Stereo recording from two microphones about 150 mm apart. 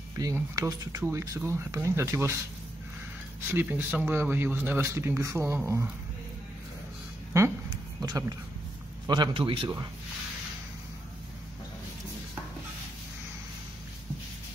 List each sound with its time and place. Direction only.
0.2 s speech: 25° right (ahead or behind)
3.4 s speech: 15° right (ahead or behind)
8.0 s speech: 15° right (ahead or behind)
9.0 s a man's voice: 30° right (ahead or behind)